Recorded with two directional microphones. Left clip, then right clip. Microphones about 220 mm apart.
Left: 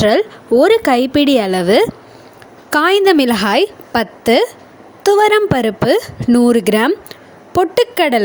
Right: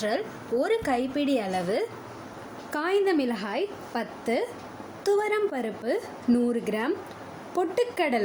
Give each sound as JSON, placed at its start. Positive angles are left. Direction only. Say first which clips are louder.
{"t": 0.0, "sound": "a woman's voice", "louder": "left 16 dB", "side_deg": 40}